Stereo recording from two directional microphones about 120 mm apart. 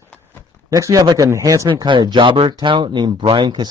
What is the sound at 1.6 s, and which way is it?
Speech, 40° right (ahead or behind).